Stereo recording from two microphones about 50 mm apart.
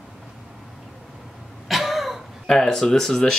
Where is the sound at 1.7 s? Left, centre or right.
Centre.